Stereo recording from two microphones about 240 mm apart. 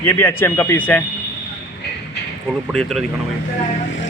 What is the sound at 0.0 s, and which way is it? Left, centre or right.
Speech, centre.